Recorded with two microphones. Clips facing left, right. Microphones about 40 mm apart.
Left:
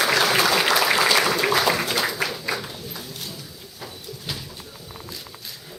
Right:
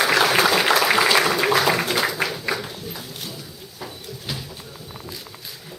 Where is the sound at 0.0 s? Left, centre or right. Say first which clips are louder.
Right 2 dB; centre.